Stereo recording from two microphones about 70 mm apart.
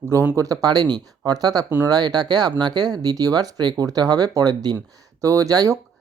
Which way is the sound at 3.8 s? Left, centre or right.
Right.